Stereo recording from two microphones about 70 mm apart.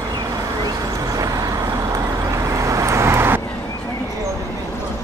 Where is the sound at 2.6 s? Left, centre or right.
Right.